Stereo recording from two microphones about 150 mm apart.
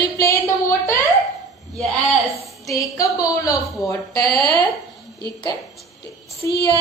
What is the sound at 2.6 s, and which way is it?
A woman's voice, 20° left (ahead or behind).